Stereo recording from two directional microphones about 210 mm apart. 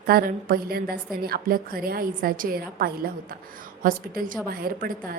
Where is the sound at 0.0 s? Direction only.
45° right (ahead or behind).